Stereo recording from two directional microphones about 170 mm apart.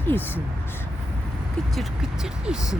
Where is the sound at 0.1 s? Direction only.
10° left (ahead or behind).